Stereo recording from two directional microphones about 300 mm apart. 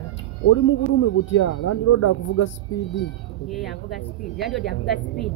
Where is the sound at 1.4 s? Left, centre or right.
Left.